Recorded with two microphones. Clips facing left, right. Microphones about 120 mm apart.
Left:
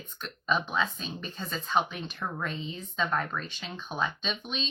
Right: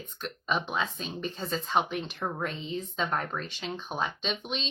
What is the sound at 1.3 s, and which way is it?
Speech, 30° right (ahead or behind).